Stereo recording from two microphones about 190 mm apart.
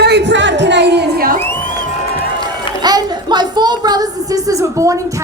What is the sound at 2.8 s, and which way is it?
Speech, 20° right (ahead or behind).